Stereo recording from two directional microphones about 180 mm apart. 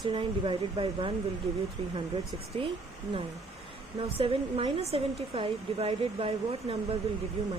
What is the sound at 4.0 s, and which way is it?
A woman's voice, 30° right (ahead or behind).